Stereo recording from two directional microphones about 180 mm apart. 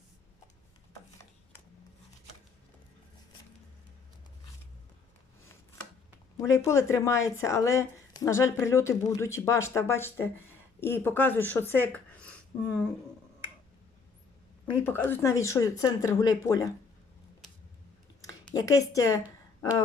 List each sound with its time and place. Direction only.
6.3 s speech: 15° left (ahead or behind)
14.8 s speech: 10° left (ahead or behind)
18.5 s speech: 20° left (ahead or behind)